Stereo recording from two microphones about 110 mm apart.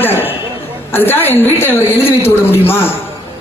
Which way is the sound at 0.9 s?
20° left (ahead or behind).